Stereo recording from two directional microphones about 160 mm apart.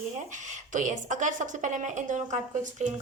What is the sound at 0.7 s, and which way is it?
A woman's voice, 50° right (ahead or behind).